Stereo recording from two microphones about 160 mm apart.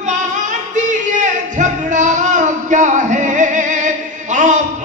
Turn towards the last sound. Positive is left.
turn(degrees=-50)  # may be behind; listen again after turning